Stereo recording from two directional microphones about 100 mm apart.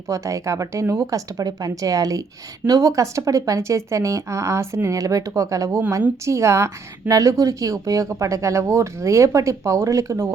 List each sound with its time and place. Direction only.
0.1 s speech: 30° right (ahead or behind)